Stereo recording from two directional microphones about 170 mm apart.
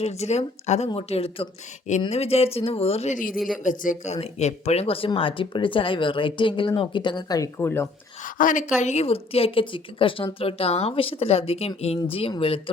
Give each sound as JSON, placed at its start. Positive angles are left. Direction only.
{"t": 0.0, "sound": "speech", "side_deg": 40}
{"t": 3.3, "sound": "speech", "side_deg": 0}
{"t": 3.6, "sound": "speech", "side_deg": 50}
{"t": 8.2, "sound": "speech", "side_deg": 50}